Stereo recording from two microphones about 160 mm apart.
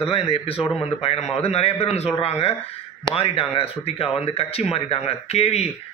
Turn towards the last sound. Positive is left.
turn(degrees=40)  # may be behind; listen again after turning